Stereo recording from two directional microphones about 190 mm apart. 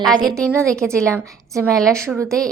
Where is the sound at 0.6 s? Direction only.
5° left (ahead or behind).